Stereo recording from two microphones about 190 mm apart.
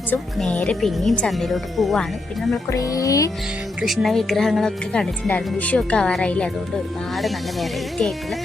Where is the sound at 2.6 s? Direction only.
15° left (ahead or behind).